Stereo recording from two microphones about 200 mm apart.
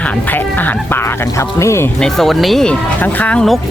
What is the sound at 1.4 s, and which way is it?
Speech, 15° left (ahead or behind).